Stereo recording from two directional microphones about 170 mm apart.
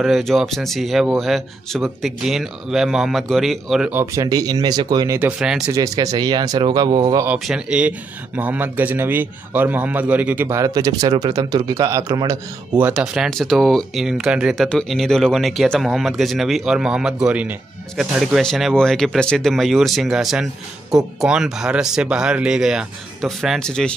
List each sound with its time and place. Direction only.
0.0 s speech: centre (ahead or behind)
3.9 s speech: 15° right (ahead or behind)
7.2 s a man's voice: 5° right (ahead or behind); by 12.8 s 20° right (ahead or behind)
12.8 s speech: 5° right (ahead or behind)